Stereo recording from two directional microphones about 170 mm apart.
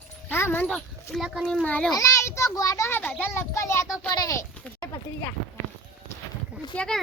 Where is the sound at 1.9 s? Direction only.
20° left (ahead or behind).